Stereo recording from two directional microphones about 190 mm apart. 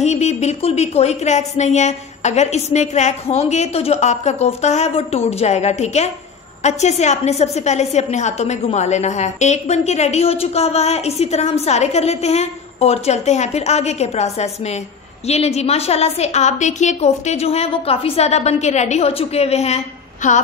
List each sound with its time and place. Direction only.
0.0 s a woman's voice: 35° left (ahead or behind)